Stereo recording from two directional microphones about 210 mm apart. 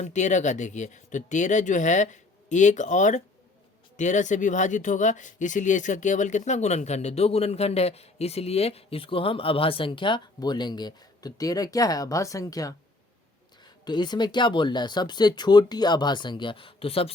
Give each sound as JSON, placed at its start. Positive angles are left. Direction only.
{"t": 0.0, "sound": "speech", "side_deg": 35}
{"t": 13.8, "sound": "speech", "side_deg": 20}